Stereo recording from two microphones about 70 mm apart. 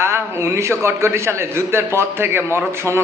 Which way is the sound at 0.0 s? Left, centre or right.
Right.